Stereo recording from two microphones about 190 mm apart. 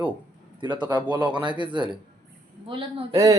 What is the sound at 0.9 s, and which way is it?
Speech, 10° right (ahead or behind).